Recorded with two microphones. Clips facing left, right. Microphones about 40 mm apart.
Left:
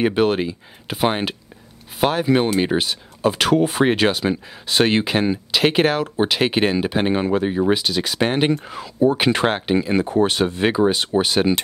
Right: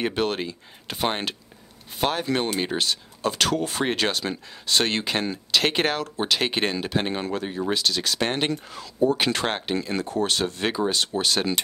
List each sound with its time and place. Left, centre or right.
0.0 s speech: centre